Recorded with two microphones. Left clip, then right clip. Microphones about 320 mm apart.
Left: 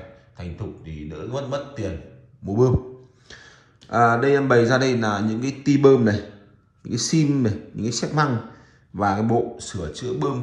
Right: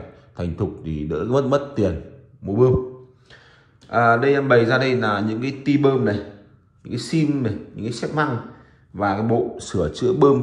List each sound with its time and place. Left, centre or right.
0.4 s speech: centre
2.4 s speech: centre
3.9 s speech: centre
9.6 s speech: centre